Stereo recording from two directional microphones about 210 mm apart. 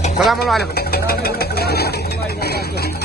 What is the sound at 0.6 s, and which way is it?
Vehicle, 50° left (ahead or behind).